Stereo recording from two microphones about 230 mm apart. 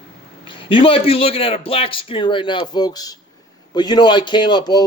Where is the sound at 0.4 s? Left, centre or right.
Left.